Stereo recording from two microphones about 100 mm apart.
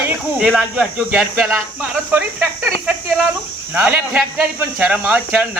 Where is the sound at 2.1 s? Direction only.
25° right (ahead or behind).